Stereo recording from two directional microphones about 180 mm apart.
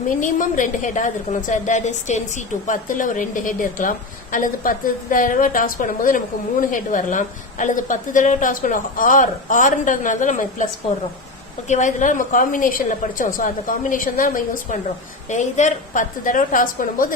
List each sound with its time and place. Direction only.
0.1 s a woman's voice: 45° left (ahead or behind)
11.7 s a woman's voice: 40° left (ahead or behind)